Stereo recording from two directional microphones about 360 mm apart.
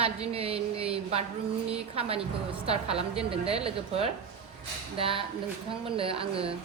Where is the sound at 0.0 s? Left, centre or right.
Centre.